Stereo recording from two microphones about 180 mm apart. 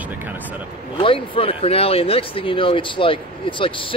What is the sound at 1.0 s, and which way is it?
Speech, 30° left (ahead or behind).